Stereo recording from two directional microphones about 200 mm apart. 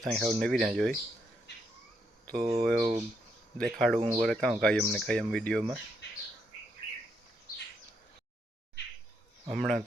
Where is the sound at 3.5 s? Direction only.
5° left (ahead or behind).